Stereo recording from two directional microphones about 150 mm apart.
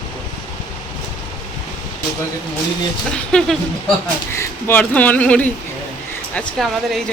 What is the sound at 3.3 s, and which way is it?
Speech, 5° left (ahead or behind).